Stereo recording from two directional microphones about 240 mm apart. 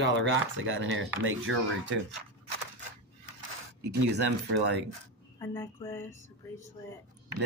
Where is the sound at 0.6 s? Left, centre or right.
Right.